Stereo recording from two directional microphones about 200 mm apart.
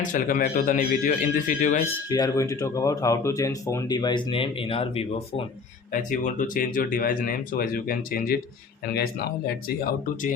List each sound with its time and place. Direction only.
0.0 s speech: 40° left (ahead or behind)
2.0 s speech: 20° left (ahead or behind)
5.9 s speech: 40° left (ahead or behind)